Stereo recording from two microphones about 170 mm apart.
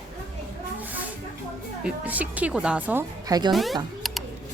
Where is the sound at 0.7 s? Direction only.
10° right (ahead or behind).